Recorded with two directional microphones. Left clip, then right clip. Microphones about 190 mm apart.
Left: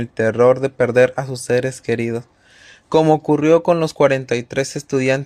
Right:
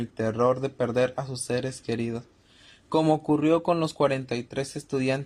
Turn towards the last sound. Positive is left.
turn(degrees=30)  # may be behind; listen again after turning